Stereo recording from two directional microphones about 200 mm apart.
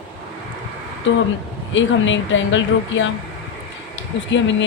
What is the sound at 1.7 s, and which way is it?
Speech, 70° left (ahead or behind).